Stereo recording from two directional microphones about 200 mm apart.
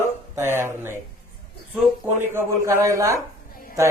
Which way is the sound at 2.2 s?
10° right (ahead or behind).